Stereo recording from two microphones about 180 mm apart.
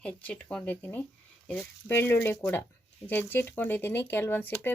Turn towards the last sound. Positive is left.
turn(degrees=10)  # may be behind; listen again after turning